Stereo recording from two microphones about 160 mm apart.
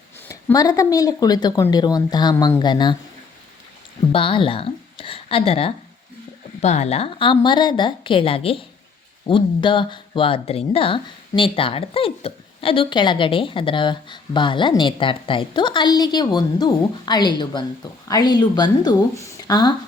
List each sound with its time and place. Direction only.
0.3 s speech: 20° left (ahead or behind)
4.1 s speech: 35° left (ahead or behind)